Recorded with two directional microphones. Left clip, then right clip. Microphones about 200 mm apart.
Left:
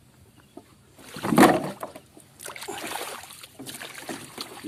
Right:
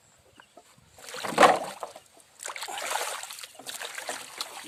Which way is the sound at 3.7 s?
30° right (ahead or behind).